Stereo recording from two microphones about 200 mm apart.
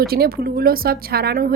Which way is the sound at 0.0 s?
50° right (ahead or behind).